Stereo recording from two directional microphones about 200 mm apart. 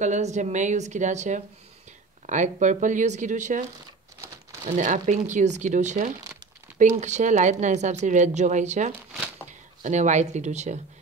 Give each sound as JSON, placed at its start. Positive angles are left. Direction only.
{"t": 0.0, "sound": "a woman's voice", "side_deg": -35}
{"t": 4.6, "sound": "a woman's voice", "side_deg": -40}